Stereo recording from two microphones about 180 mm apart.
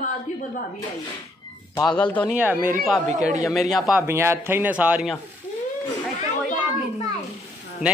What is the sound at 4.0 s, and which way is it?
Speech, 15° right (ahead or behind).